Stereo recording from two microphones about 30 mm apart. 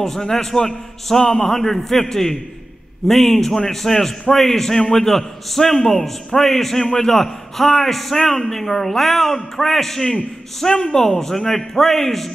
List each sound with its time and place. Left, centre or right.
0.0 s a man's voice: centre